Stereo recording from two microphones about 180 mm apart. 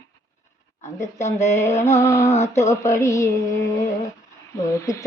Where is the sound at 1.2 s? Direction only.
40° left (ahead or behind).